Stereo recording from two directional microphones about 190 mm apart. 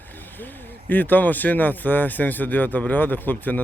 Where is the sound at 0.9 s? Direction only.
10° left (ahead or behind).